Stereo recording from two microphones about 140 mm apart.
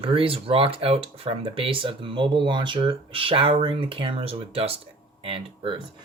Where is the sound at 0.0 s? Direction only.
40° right (ahead or behind).